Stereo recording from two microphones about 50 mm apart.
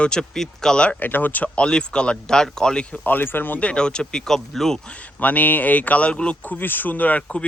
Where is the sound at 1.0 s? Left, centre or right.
Left.